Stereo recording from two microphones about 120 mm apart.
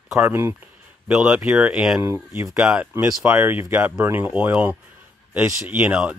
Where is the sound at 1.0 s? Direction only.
5° right (ahead or behind).